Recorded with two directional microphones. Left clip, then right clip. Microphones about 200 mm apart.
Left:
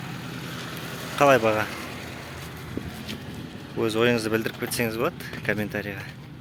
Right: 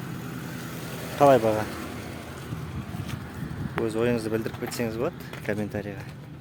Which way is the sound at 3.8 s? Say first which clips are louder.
Left 4 dB; centre (ahead or behind).